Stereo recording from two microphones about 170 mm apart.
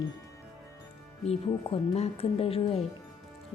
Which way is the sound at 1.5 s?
30° left (ahead or behind).